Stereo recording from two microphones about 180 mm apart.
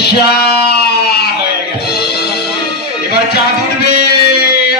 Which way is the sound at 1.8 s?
60° left (ahead or behind).